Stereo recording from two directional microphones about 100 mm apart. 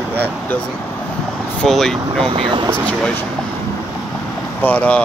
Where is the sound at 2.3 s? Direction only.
60° right (ahead or behind).